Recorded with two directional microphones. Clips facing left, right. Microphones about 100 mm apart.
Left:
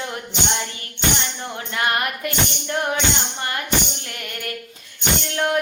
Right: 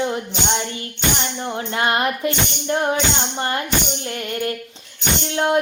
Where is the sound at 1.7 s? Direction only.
25° right (ahead or behind).